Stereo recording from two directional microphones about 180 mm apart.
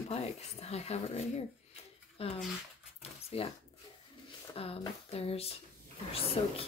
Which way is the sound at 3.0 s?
35° left (ahead or behind).